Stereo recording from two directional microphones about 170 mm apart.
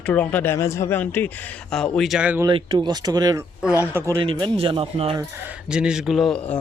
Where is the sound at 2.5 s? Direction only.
25° right (ahead or behind).